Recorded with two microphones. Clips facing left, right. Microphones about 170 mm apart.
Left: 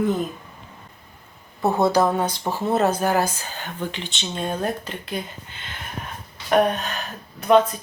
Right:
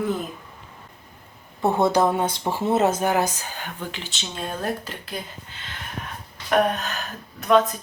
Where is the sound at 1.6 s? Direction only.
10° left (ahead or behind).